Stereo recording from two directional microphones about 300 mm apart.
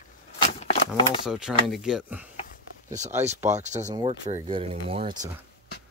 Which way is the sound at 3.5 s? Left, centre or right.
Right.